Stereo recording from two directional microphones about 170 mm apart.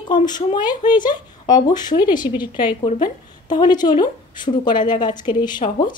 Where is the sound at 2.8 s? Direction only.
50° left (ahead or behind).